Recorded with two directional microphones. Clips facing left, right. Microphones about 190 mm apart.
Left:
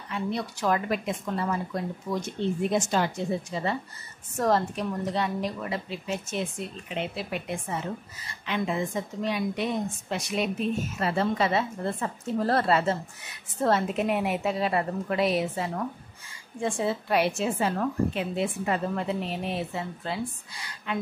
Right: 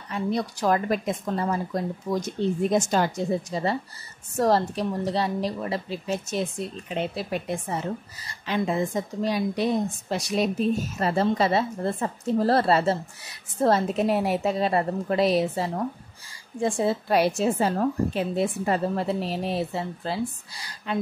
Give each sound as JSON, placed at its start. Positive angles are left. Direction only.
{"t": 0.1, "sound": "a woman's voice", "side_deg": -40}